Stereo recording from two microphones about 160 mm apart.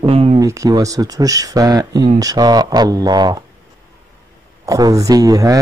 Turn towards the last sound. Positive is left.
turn(degrees=-20)  # may be behind; listen again after turning